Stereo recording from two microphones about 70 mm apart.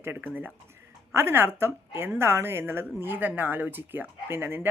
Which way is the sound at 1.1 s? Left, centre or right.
Right.